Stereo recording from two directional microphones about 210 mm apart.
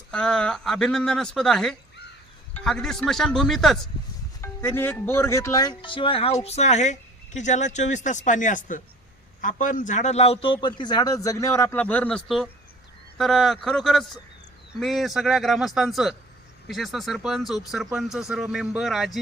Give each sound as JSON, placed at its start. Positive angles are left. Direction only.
{"t": 0.1, "sound": "a man's voice", "side_deg": 5}